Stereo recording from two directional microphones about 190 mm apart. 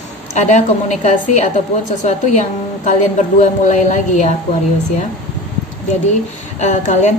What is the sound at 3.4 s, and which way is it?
Speech, 40° left (ahead or behind).